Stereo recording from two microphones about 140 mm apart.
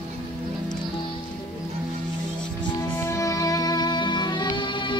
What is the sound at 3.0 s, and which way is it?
Music, 20° left (ahead or behind).